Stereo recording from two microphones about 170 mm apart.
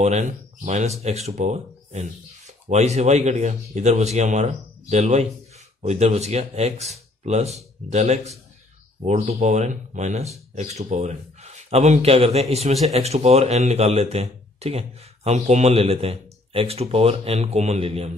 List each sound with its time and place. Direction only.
0.0 s speech: 45° right (ahead or behind)